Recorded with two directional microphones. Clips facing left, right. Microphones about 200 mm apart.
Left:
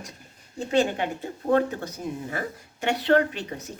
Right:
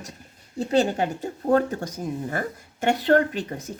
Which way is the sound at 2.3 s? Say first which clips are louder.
Right 3 dB; 45° right (ahead or behind).